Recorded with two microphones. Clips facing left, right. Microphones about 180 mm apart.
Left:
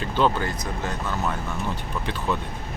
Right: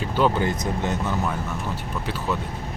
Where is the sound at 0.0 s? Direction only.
10° right (ahead or behind).